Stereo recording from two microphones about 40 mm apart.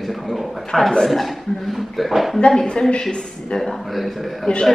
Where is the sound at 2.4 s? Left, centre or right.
Centre.